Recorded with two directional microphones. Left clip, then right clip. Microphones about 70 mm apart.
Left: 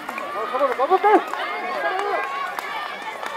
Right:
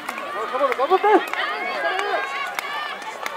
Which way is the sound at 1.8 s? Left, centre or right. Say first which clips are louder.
Even; right.